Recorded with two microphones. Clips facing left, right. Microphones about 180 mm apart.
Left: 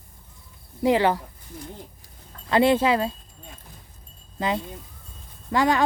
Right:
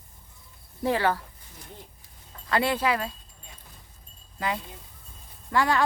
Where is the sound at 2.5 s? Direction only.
25° left (ahead or behind).